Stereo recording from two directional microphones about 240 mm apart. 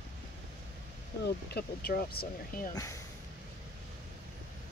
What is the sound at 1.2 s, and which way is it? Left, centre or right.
Speech, left.